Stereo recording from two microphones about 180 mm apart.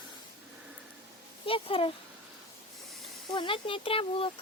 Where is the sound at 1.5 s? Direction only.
30° left (ahead or behind).